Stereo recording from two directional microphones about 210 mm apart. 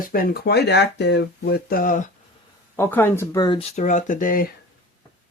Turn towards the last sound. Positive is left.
turn(degrees=40)  # may be behind; listen again after turning